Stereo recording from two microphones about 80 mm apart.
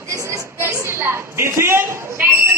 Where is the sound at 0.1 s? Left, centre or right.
Right.